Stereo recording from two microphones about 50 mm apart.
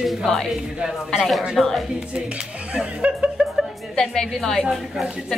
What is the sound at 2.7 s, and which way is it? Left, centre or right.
Speech, right.